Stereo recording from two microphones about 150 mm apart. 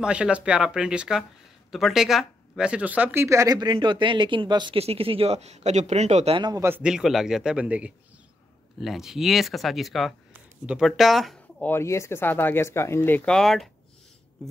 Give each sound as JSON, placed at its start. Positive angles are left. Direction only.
{"t": 0.0, "sound": "speech", "side_deg": -5}
{"t": 6.3, "sound": "speech", "side_deg": -30}
{"t": 6.6, "sound": "speech", "side_deg": -10}
{"t": 10.3, "sound": "a sound", "side_deg": -10}
{"t": 10.9, "sound": "speech", "side_deg": 0}
{"t": 11.6, "sound": "speech", "side_deg": 15}